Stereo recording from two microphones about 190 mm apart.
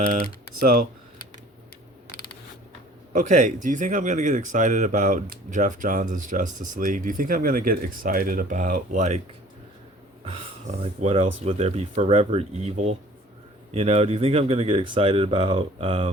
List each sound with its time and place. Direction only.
3.1 s speech: 40° right (ahead or behind)
10.2 s speech: 30° right (ahead or behind)